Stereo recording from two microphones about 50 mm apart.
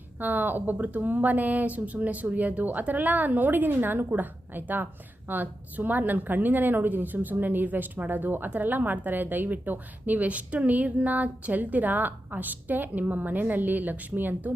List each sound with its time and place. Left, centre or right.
0.2 s a woman's voice: right